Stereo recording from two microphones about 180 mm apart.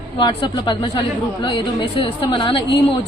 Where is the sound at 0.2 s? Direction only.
25° left (ahead or behind).